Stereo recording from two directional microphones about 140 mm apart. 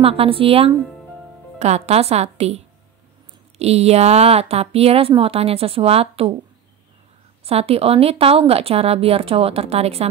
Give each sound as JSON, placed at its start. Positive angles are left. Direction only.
{"t": 0.0, "sound": "speech", "side_deg": -45}
{"t": 7.4, "sound": "speech", "side_deg": -45}